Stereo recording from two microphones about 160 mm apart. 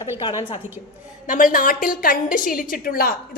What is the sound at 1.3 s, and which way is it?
A woman's voice, 55° left (ahead or behind).